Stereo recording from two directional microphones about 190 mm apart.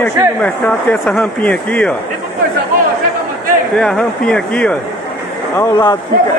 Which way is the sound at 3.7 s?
5° left (ahead or behind).